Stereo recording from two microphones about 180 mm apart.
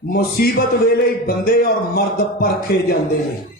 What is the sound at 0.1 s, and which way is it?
Speech, 60° left (ahead or behind).